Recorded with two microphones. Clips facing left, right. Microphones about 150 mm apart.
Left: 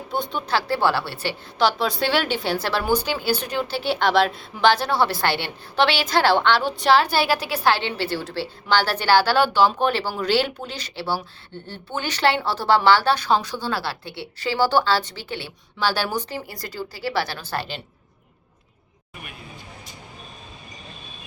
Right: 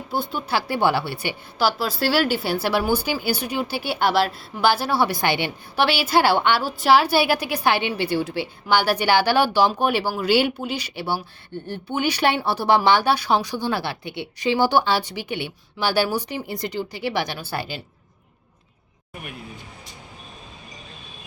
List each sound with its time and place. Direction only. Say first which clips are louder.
0.1 s speech: even; 5° right (ahead or behind)
16.5 s speech: right 5 dB; 20° right (ahead or behind)